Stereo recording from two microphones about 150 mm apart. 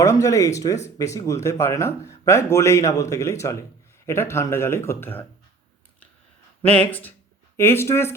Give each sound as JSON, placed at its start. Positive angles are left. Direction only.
{"t": 0.0, "sound": "speech", "side_deg": 20}
{"t": 6.6, "sound": "speech", "side_deg": 10}